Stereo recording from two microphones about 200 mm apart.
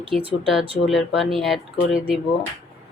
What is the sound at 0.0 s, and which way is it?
Speech, 25° right (ahead or behind).